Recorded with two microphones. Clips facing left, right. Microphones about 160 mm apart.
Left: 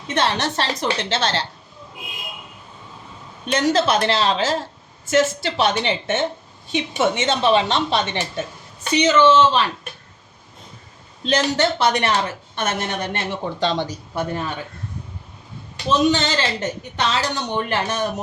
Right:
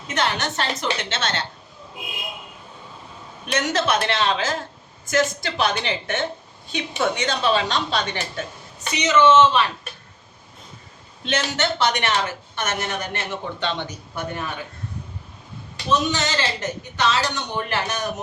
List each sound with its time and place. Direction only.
0.1 s a woman's voice: 30° left (ahead or behind)
3.4 s a woman's voice: 30° left (ahead or behind)
11.3 s a woman's voice: 35° left (ahead or behind)
15.9 s a woman's voice: 30° left (ahead or behind)